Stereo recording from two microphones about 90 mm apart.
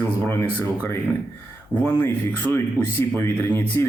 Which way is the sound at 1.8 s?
20° left (ahead or behind).